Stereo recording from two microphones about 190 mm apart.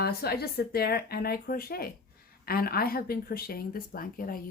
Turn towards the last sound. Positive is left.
turn(degrees=50)  # may be behind; listen again after turning